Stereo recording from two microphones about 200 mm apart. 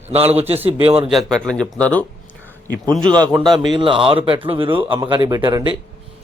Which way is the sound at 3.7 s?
25° right (ahead or behind).